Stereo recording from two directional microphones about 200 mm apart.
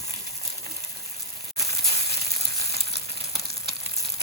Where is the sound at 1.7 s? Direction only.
50° right (ahead or behind).